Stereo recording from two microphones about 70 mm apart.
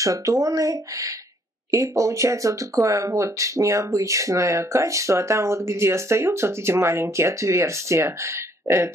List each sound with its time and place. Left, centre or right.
0.0 s speech: right